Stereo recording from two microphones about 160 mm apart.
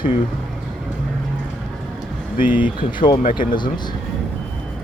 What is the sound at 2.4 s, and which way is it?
Speech, 10° right (ahead or behind).